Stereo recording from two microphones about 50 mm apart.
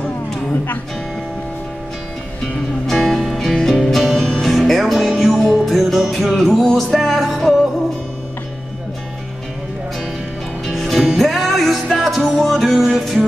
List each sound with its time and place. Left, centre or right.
2.9 s music: centre
10.7 s music: centre